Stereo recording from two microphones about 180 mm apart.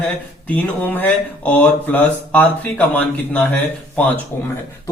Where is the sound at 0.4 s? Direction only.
10° left (ahead or behind).